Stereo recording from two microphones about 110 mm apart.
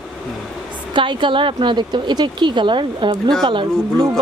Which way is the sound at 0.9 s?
50° right (ahead or behind).